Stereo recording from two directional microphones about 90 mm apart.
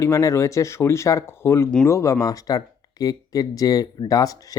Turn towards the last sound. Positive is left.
turn(degrees=45)  # may be behind; listen again after turning